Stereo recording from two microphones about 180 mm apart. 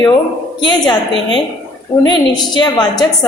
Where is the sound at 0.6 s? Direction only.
25° left (ahead or behind).